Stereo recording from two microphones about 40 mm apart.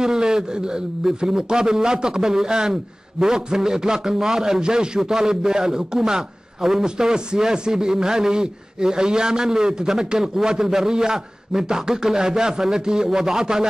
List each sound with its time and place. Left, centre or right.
0.0 s a man's voice: centre